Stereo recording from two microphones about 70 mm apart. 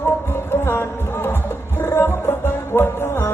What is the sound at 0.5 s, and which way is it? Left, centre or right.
Music, left.